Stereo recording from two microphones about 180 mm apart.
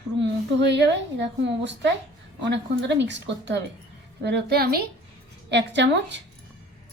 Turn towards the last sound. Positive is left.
turn(degrees=-75)  # may be behind; listen again after turning